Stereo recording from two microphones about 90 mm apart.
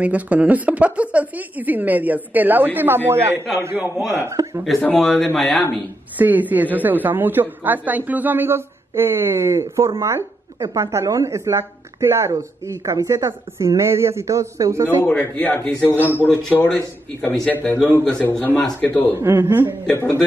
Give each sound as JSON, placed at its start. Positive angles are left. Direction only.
{"t": 0.0, "sound": "a woman's voice", "side_deg": -15}
{"t": 4.3, "sound": "a woman's voice", "side_deg": -35}
{"t": 4.9, "sound": "speech", "side_deg": 5}
{"t": 6.1, "sound": "a woman's voice", "side_deg": -20}
{"t": 15.0, "sound": "speech", "side_deg": 25}
{"t": 15.5, "sound": "a man's voice", "side_deg": 15}
{"t": 18.0, "sound": "a man's voice", "side_deg": 10}
{"t": 19.1, "sound": "a woman's voice", "side_deg": -30}
{"t": 19.9, "sound": "a man's voice", "side_deg": 20}